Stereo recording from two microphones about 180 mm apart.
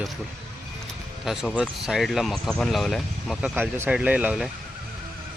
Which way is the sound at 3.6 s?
10° right (ahead or behind).